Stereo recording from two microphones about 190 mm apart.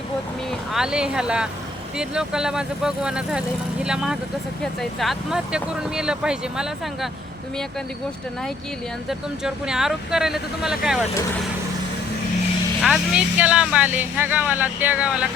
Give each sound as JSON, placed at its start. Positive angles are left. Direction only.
{"t": 0.7, "sound": "speech", "side_deg": -5}
{"t": 9.0, "sound": "speech", "side_deg": -5}
{"t": 12.8, "sound": "speech", "side_deg": -5}